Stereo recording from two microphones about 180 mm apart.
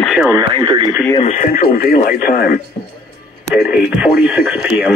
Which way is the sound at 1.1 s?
40° left (ahead or behind).